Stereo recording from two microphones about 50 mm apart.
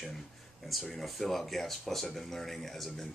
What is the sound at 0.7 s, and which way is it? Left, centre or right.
Speech, centre.